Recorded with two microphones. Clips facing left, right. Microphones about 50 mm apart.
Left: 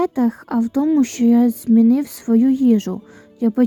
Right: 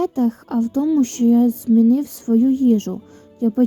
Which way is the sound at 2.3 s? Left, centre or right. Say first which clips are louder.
Left 1 dB; left.